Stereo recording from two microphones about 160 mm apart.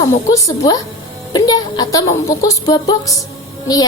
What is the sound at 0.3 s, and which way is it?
A woman's voice, 20° left (ahead or behind).